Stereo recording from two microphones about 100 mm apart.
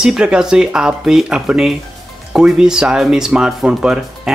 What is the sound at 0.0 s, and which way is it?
Speech, 5° right (ahead or behind).